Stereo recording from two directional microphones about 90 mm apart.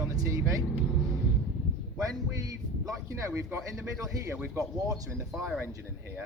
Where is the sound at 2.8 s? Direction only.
35° right (ahead or behind).